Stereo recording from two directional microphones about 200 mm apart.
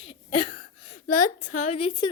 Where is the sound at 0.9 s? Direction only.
40° left (ahead or behind); by 2.1 s 25° left (ahead or behind).